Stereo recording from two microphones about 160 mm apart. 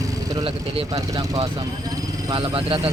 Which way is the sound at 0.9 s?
20° right (ahead or behind).